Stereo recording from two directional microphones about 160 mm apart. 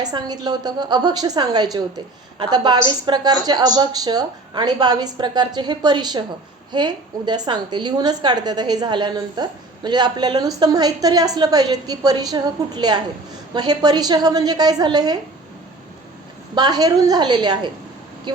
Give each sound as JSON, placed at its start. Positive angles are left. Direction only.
{"t": 0.0, "sound": "a woman's voice", "side_deg": -25}
{"t": 16.6, "sound": "a woman's voice", "side_deg": -25}